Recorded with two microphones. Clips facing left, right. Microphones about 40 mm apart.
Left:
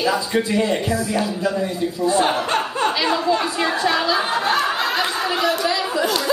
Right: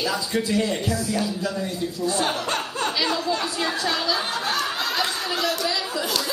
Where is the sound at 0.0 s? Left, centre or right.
Left.